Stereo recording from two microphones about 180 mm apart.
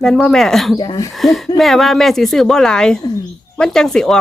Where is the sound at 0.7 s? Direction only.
25° left (ahead or behind).